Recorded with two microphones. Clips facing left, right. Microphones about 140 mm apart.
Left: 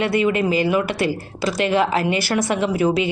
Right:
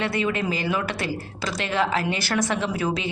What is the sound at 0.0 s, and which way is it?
A woman's voice, 15° left (ahead or behind).